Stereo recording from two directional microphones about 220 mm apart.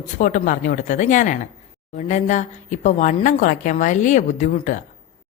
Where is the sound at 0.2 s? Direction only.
40° left (ahead or behind).